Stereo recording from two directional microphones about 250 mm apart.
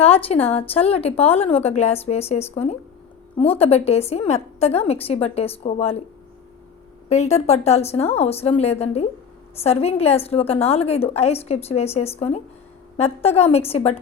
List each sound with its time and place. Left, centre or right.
0.0 s a woman's voice: left
7.1 s a woman's voice: left